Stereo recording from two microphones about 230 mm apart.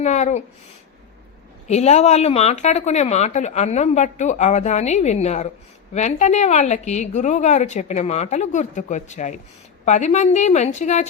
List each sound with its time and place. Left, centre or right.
0.0 s a woman's voice: left
1.6 s a woman's voice: left